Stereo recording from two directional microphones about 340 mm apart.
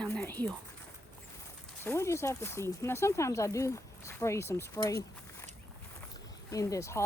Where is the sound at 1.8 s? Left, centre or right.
Centre.